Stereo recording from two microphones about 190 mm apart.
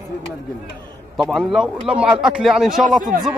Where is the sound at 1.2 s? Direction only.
Centre (ahead or behind).